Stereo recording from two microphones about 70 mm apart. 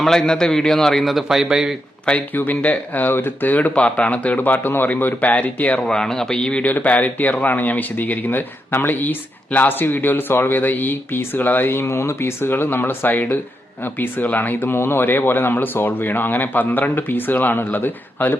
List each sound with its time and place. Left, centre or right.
0.0 s a man's voice: centre
2.0 s a man's voice: left
5.8 s a man's voice: centre; by 18.3 s left